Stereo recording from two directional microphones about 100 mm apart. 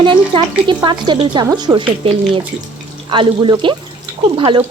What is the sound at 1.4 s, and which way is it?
Speech, 40° right (ahead or behind).